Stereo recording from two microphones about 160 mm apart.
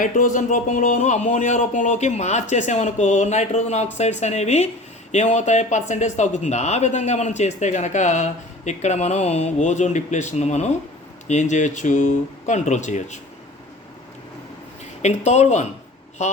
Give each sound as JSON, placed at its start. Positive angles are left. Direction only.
{"t": 0.0, "sound": "speech", "side_deg": 55}
{"t": 15.0, "sound": "speech", "side_deg": 45}